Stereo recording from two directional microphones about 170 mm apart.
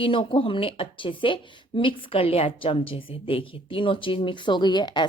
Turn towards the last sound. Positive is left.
turn(degrees=25)  # may be behind; listen again after turning